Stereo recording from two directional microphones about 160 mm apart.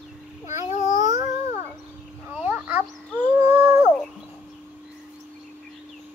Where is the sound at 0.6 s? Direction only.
50° left (ahead or behind).